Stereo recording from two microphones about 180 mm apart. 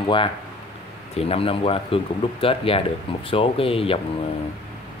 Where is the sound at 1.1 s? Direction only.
30° left (ahead or behind).